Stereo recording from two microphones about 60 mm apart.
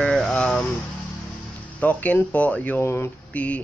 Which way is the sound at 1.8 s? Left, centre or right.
Left.